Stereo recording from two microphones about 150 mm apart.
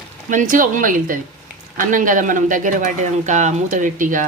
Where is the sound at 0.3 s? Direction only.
60° right (ahead or behind).